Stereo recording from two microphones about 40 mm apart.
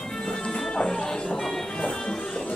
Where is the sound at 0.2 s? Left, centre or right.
Centre.